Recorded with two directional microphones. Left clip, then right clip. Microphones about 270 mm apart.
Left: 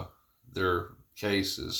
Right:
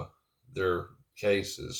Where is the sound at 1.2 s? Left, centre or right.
Left.